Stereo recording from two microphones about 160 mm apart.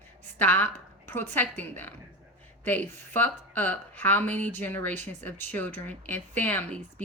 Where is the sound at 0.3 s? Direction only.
10° left (ahead or behind).